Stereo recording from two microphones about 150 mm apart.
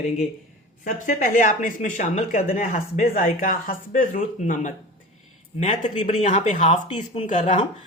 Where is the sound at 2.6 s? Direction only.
65° left (ahead or behind).